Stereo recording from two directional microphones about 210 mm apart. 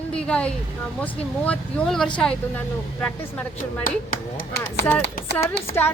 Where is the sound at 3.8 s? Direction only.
40° left (ahead or behind).